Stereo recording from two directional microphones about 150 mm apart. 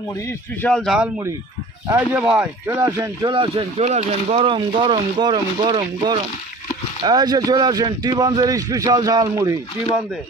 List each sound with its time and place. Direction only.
0.6 s speech: 5° left (ahead or behind)
1.9 s a man's voice: 10° right (ahead or behind)